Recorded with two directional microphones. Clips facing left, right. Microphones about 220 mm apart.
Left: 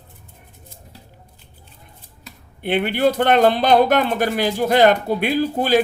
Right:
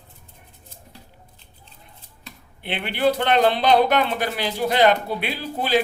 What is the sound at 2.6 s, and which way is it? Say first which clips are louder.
Speech: left 5 dB; 45° left (ahead or behind).